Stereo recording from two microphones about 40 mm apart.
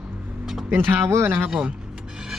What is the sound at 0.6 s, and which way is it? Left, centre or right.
Speech, right.